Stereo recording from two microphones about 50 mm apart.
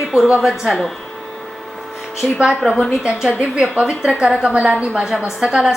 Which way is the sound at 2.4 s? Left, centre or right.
Centre.